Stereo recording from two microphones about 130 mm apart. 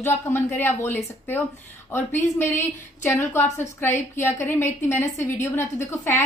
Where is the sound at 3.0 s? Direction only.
15° left (ahead or behind).